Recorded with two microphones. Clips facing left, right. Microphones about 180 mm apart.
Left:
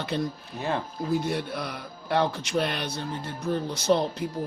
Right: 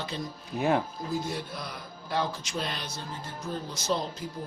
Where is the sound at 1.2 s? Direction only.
65° left (ahead or behind).